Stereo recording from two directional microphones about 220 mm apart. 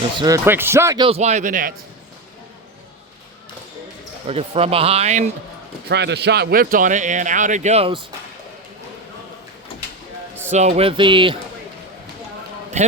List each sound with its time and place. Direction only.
0.2 s speech: 15° right (ahead or behind); by 1.7 s 35° right (ahead or behind)
4.3 s speech: 25° right (ahead or behind)
5.9 s speech: 50° right (ahead or behind); by 8.0 s 25° right (ahead or behind)
10.5 s speech: 30° right (ahead or behind)